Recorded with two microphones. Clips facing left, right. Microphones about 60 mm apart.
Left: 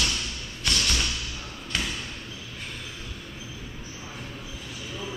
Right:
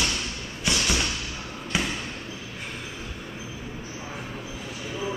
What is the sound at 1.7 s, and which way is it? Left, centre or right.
Basketball bounce, centre.